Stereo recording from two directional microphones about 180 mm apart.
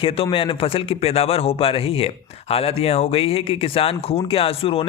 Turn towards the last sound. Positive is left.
turn(degrees=30)  # may be behind; listen again after turning